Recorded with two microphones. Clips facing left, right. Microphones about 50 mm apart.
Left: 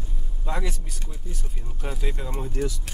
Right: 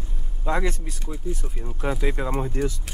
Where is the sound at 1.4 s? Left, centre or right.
Right.